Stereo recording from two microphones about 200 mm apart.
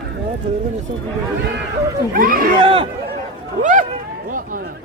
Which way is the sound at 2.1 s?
45° right (ahead or behind).